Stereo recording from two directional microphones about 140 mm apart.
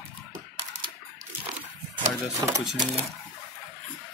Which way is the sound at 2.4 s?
25° right (ahead or behind).